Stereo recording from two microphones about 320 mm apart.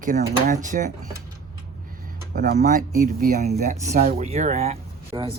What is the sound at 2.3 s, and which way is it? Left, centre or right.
Speech, right.